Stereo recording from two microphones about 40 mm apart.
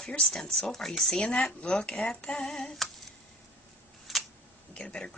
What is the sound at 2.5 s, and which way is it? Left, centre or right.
Speech, centre.